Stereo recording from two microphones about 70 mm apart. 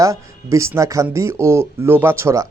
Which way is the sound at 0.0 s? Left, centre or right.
Right.